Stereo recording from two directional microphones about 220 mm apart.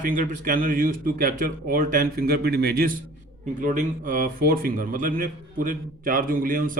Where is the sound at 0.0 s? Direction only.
40° right (ahead or behind).